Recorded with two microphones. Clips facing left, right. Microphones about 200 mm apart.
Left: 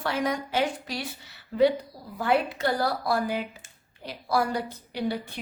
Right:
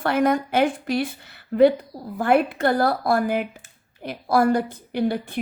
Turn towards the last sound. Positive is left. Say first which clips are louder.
# right 6 dB
turn(degrees=-50)  # may be behind; listen again after turning